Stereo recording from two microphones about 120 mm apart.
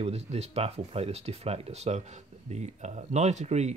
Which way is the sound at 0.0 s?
60° right (ahead or behind).